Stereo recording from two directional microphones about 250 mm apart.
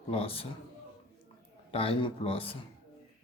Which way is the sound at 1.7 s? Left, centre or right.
Left.